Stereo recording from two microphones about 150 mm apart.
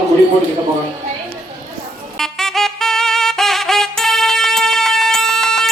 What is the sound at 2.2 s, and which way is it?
Saxophone, 5° left (ahead or behind).